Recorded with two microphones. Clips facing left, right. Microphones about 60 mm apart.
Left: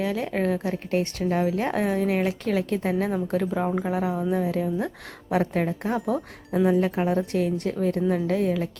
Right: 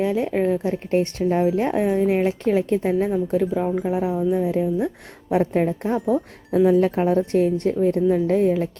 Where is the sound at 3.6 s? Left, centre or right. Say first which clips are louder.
Right 3 dB; left.